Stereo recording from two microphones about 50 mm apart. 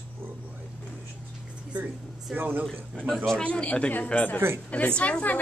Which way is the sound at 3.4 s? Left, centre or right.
Left.